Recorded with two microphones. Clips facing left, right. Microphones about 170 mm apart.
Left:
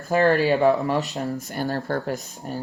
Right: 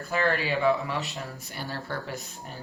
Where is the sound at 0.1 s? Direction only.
40° left (ahead or behind).